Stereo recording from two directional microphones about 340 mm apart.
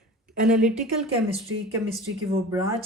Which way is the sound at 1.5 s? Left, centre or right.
Right.